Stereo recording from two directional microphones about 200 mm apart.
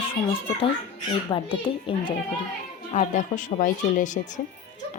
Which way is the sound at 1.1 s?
25° left (ahead or behind).